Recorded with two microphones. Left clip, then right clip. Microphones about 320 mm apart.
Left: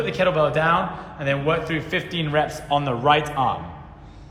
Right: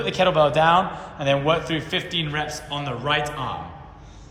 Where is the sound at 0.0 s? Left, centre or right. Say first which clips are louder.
Right 1 dB; centre.